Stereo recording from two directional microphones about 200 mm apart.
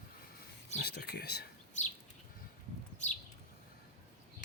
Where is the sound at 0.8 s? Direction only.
55° left (ahead or behind).